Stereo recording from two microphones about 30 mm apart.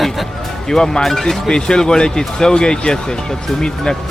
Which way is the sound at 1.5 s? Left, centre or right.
Left.